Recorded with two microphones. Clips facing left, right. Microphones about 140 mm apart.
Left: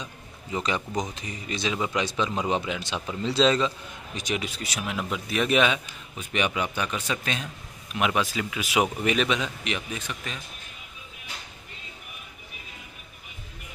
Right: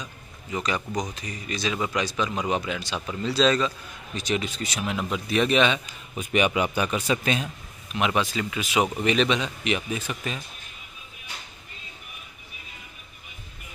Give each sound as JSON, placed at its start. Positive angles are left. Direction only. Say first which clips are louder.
{"t": 0.0, "sound": "speech", "louder": "left 1 dB", "side_deg": 25}
{"t": 6.1, "sound": "speech", "louder": "right 4 dB", "side_deg": -10}